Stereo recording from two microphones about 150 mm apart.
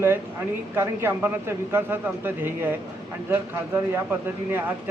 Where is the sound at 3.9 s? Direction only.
15° right (ahead or behind).